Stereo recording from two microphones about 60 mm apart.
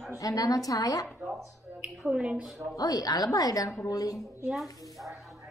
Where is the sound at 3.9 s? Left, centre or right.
Left.